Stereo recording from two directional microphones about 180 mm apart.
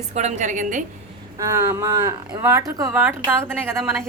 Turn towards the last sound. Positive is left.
turn(degrees=-15)  # may be behind; listen again after turning